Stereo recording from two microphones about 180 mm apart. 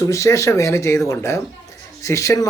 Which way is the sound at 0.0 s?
15° left (ahead or behind).